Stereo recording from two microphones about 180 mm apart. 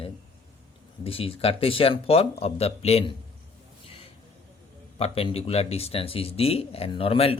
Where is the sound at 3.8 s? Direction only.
35° left (ahead or behind).